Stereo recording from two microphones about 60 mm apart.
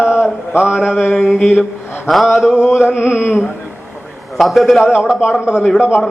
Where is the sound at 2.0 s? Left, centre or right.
Centre.